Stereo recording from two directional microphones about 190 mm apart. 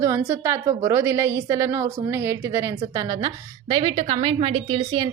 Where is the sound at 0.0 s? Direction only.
15° right (ahead or behind).